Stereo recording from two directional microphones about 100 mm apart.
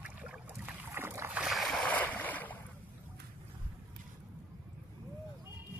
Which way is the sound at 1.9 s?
15° left (ahead or behind).